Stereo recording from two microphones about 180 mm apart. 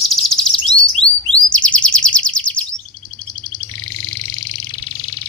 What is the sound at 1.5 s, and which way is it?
Bird, 5° left (ahead or behind).